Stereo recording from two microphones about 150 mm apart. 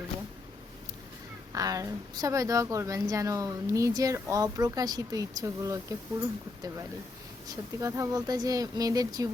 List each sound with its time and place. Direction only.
1.5 s a woman's voice: 25° right (ahead or behind)